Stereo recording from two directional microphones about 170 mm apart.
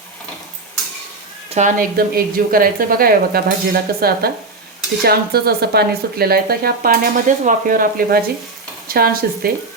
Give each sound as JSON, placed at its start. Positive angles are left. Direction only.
{"t": 1.5, "sound": "speech", "side_deg": -45}
{"t": 2.0, "sound": "speech", "side_deg": -60}